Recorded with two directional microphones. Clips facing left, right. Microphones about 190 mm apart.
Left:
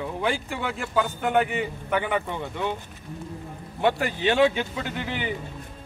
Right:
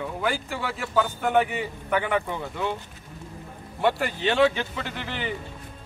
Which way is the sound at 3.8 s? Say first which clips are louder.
Left 1 dB; 5° left (ahead or behind).